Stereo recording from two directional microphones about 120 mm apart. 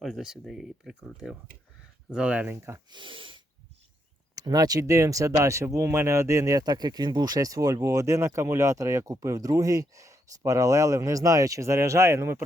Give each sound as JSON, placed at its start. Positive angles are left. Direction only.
{"t": 0.0, "sound": "speech", "side_deg": -5}
{"t": 2.6, "sound": "speech", "side_deg": -25}
{"t": 2.9, "sound": "speech", "side_deg": -45}
{"t": 4.4, "sound": "speech", "side_deg": -30}